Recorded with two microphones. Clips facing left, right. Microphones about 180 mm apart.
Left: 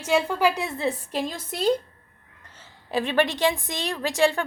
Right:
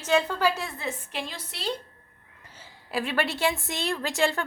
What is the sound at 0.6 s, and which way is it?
A woman's voice, 30° left (ahead or behind).